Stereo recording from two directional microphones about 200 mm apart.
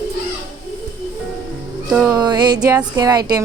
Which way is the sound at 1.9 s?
5° right (ahead or behind).